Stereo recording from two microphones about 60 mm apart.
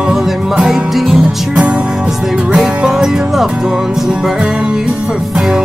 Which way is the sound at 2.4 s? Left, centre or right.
Centre.